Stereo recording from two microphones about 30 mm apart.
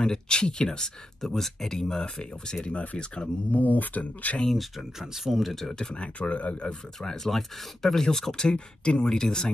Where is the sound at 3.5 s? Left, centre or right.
Left.